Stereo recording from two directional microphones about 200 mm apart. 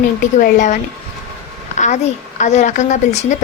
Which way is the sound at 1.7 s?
35° left (ahead or behind).